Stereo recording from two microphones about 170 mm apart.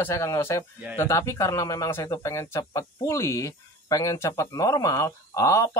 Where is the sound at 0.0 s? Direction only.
15° left (ahead or behind).